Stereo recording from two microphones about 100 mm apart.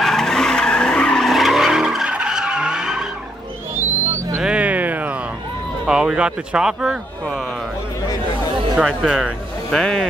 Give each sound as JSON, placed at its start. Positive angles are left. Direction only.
{"t": 0.0, "sound": "vehicle", "side_deg": 5}
{"t": 3.7, "sound": "a sound", "side_deg": -20}
{"t": 4.4, "sound": "music", "side_deg": -10}
{"t": 5.9, "sound": "speech", "side_deg": -5}
{"t": 8.8, "sound": "speech", "side_deg": 0}